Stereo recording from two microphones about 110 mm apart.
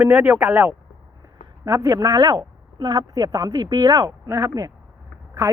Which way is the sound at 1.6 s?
30° right (ahead or behind).